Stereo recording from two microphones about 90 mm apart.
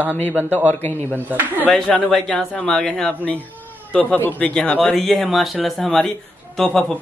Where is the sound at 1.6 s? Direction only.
10° left (ahead or behind).